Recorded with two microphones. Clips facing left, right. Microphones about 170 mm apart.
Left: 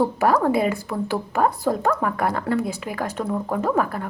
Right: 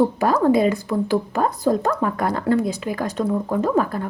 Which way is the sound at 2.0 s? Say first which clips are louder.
Right 2 dB; 35° right (ahead or behind).